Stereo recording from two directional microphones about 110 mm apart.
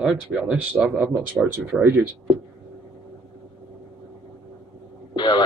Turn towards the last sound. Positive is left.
turn(degrees=40)  # may be behind; listen again after turning